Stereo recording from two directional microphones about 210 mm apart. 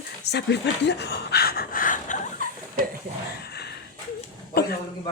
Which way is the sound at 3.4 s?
50° left (ahead or behind).